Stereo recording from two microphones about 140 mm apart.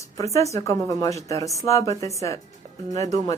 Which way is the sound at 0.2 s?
20° left (ahead or behind).